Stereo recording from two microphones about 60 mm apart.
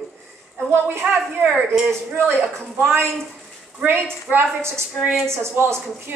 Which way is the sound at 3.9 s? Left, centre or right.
Right.